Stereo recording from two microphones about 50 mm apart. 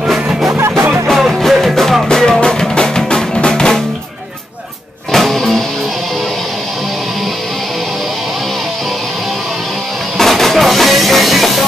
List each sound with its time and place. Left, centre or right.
0.5 s music: right
1.0 s music: centre
5.1 s music: centre
10.1 s music: centre